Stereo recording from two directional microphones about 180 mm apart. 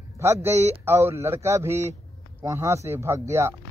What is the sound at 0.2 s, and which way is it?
Speech, 15° right (ahead or behind).